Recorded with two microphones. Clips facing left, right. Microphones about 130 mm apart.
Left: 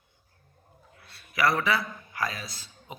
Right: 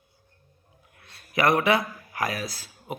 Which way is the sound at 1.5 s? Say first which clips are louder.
Right 4 dB; 55° right (ahead or behind).